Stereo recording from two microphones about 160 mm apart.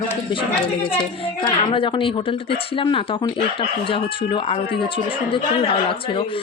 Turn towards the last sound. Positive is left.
turn(degrees=35)  # may be behind; listen again after turning